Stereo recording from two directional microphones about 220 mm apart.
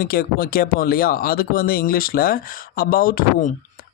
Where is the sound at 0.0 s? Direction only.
40° left (ahead or behind).